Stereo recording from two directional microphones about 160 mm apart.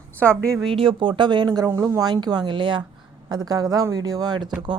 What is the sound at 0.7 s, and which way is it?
Speech, 30° right (ahead or behind).